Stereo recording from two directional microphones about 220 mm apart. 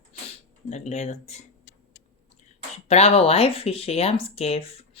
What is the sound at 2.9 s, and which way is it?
Speech, 30° left (ahead or behind).